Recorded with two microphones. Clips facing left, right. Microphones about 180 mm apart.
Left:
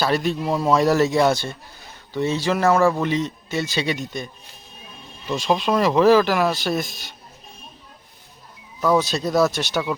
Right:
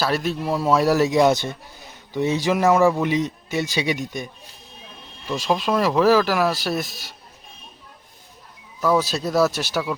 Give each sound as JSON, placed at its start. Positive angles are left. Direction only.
{"t": 0.0, "sound": "speech", "side_deg": -5}
{"t": 5.4, "sound": "speech", "side_deg": -5}
{"t": 8.8, "sound": "speech", "side_deg": -5}